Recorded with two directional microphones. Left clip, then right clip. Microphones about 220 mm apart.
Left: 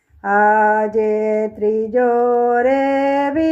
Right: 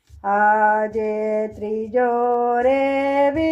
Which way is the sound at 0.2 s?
30° left (ahead or behind).